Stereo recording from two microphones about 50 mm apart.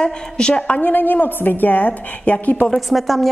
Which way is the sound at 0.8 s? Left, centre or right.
Left.